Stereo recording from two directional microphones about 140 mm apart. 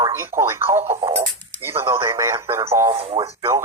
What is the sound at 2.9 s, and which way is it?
Speech, 35° right (ahead or behind).